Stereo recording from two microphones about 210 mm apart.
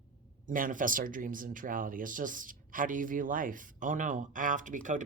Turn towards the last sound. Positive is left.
turn(degrees=-35)  # may be behind; listen again after turning